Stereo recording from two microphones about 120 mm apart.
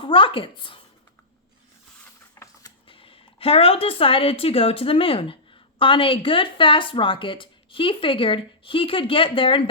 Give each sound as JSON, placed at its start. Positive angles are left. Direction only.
{"t": 0.0, "sound": "speech", "side_deg": 45}
{"t": 2.8, "sound": "speech", "side_deg": 50}